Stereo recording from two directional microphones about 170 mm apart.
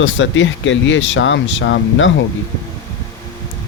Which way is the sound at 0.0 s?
90° left.